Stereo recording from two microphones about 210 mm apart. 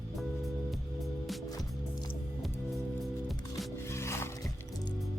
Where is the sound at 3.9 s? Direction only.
10° left (ahead or behind).